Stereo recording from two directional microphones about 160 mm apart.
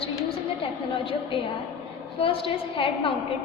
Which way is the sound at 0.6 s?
35° left (ahead or behind).